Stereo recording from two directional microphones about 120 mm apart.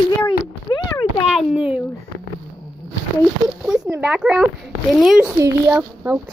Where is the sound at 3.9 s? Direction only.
15° right (ahead or behind).